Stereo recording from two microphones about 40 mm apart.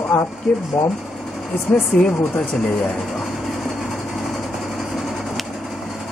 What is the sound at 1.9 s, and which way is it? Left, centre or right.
Speech, left.